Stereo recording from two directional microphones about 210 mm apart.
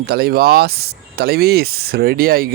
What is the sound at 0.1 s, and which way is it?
A man's voice, 50° right (ahead or behind).